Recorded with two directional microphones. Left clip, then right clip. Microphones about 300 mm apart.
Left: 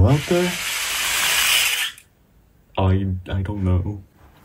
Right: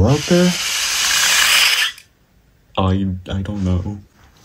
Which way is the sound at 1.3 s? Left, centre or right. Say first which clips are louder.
Right 5 dB; right.